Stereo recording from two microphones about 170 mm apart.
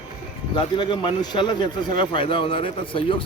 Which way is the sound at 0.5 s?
30° left (ahead or behind).